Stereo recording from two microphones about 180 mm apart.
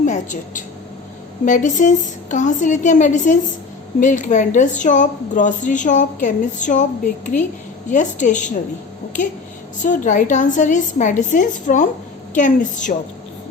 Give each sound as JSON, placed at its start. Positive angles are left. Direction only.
{"t": 0.0, "sound": "a woman's voice", "side_deg": 45}
{"t": 9.8, "sound": "speech", "side_deg": 45}